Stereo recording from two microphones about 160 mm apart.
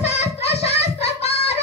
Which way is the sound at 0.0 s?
40° left (ahead or behind).